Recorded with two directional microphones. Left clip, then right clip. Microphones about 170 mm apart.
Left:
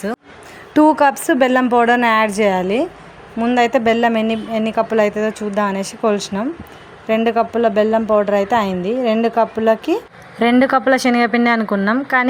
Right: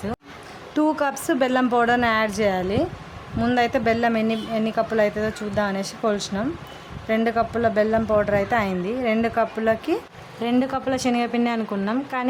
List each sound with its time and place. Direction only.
0.7 s a woman's voice: 25° left (ahead or behind)